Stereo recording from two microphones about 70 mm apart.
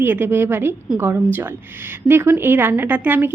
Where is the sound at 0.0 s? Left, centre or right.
Right.